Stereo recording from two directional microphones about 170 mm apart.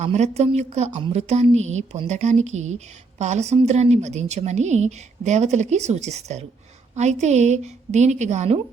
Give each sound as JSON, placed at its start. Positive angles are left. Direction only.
{"t": 0.0, "sound": "a woman's voice", "side_deg": -40}